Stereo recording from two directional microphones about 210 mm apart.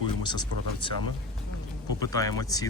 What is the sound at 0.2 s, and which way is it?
Speech, 20° left (ahead or behind).